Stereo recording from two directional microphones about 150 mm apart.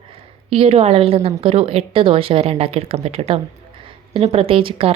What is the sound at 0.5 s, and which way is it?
A woman's voice, 40° right (ahead or behind).